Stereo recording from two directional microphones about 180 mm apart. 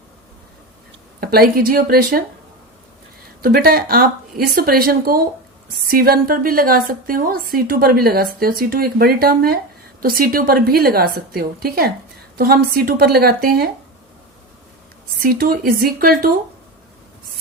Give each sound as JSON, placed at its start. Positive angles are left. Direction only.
{"t": 1.2, "sound": "a woman's voice", "side_deg": -60}
{"t": 3.4, "sound": "a woman's voice", "side_deg": -55}
{"t": 15.2, "sound": "speech", "side_deg": -55}